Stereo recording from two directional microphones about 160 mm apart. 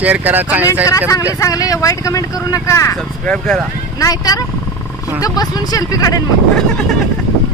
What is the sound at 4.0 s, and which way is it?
Speech, 20° left (ahead or behind).